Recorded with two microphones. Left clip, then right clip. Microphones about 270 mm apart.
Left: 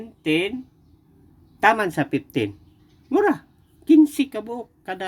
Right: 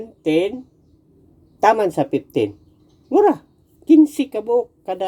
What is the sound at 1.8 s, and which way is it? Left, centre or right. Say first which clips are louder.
Speech: right 5 dB; left.